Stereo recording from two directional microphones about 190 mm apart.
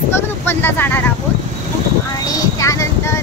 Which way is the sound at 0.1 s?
10° left (ahead or behind).